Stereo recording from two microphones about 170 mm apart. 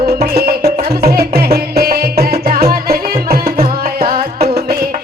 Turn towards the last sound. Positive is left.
turn(degrees=-60)  # may be behind; listen again after turning